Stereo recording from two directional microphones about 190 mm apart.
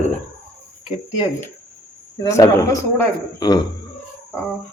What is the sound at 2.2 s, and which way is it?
Speech, 15° left (ahead or behind).